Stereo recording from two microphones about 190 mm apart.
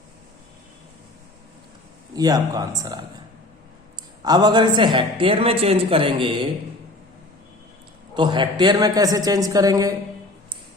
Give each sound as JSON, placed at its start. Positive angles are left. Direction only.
{"t": 2.1, "sound": "a man's voice", "side_deg": -20}
{"t": 4.2, "sound": "a man's voice", "side_deg": -20}
{"t": 8.1, "sound": "a man's voice", "side_deg": -25}